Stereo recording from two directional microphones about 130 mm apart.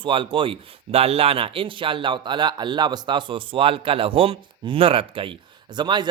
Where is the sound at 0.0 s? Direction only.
40° right (ahead or behind).